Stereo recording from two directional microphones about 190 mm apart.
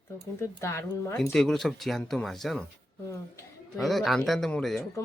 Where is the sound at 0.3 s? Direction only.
15° left (ahead or behind).